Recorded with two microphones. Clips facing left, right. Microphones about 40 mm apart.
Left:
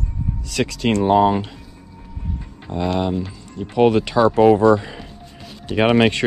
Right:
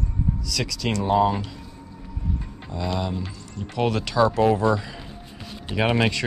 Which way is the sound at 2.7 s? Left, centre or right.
Left.